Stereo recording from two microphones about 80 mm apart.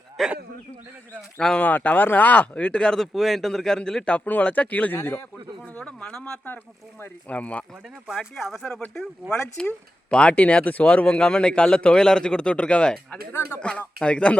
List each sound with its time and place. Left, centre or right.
0.2 s speech: centre
1.4 s speech: centre
1.6 s speech: left
4.9 s speech: left
5.7 s speech: centre
8.0 s speech: centre